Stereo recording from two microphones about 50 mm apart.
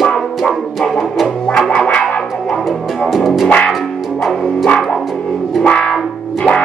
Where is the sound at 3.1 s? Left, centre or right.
Centre.